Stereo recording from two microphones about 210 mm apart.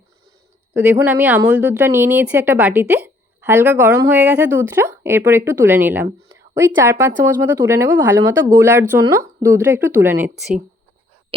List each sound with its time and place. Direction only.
0.7 s a woman's voice: 5° right (ahead or behind)